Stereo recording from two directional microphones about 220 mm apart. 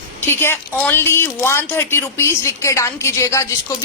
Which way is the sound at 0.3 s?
10° left (ahead or behind).